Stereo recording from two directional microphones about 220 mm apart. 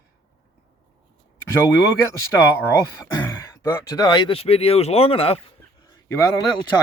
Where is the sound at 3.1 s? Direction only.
15° left (ahead or behind).